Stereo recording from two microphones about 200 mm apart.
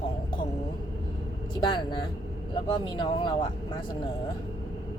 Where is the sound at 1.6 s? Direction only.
25° left (ahead or behind).